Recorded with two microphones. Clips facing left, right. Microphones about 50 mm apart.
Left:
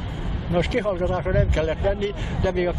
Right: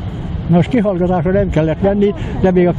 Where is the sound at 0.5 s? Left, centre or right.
Centre.